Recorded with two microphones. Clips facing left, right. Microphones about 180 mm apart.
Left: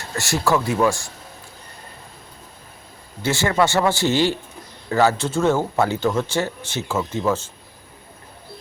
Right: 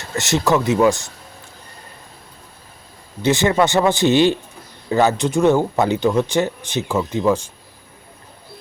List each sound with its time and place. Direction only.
0.0 s speech: 20° right (ahead or behind)
3.2 s speech: 20° right (ahead or behind)